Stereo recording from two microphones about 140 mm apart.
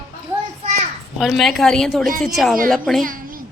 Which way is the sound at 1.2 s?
Centre (ahead or behind).